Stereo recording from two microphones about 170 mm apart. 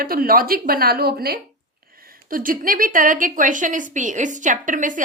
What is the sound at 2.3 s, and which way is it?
A woman's voice, 55° right (ahead or behind).